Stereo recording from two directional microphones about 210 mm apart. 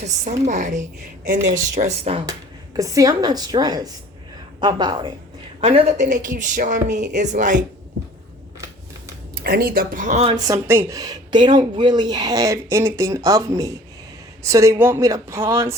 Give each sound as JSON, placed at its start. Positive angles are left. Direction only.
{"t": 0.0, "sound": "a woman's voice", "side_deg": -35}
{"t": 2.7, "sound": "a woman's voice", "side_deg": -15}
{"t": 9.3, "sound": "speech", "side_deg": -45}
{"t": 10.3, "sound": "speech", "side_deg": -15}